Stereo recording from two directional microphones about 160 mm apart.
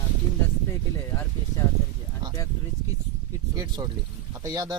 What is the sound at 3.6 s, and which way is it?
Speech, 25° right (ahead or behind).